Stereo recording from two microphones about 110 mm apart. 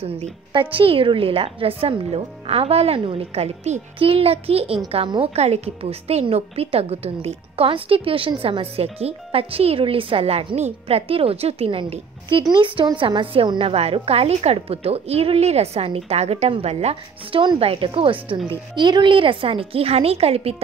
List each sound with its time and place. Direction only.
0.5 s a woman's voice: 50° right (ahead or behind)
5.3 s a woman's voice: 70° right (ahead or behind)
12.3 s a woman's voice: 50° right (ahead or behind); by 20.6 s 65° right (ahead or behind)